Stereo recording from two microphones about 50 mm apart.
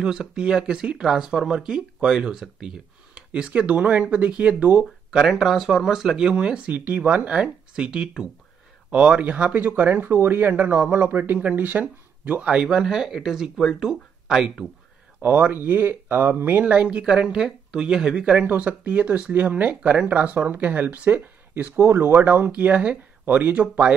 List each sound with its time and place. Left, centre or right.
0.0 s speech: centre
5.1 s speech: centre
6.7 s speech: right
12.6 s speech: centre
15.2 s speech: right
17.1 s speech: centre
18.5 s speech: right
21.7 s speech: right